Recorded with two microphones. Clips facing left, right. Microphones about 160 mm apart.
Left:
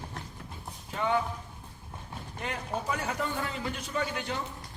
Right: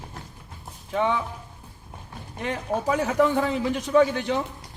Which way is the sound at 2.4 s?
90° right.